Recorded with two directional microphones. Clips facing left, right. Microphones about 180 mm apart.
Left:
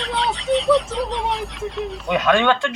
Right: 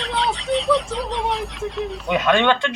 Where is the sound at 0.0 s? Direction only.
Centre (ahead or behind).